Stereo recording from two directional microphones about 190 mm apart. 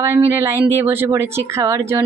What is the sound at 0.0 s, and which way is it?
A woman's voice, 15° right (ahead or behind).